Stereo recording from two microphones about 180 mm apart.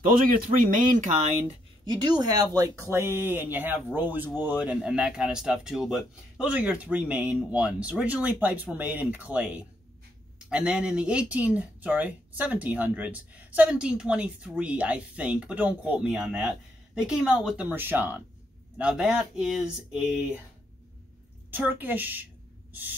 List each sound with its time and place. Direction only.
0.0 s speech: 50° right (ahead or behind)
1.9 s speech: 25° right (ahead or behind); by 20.3 s 5° right (ahead or behind)
21.5 s speech: 10° right (ahead or behind)